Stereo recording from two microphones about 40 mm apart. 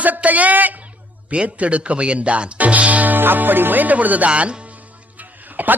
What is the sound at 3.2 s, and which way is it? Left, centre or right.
Music, right.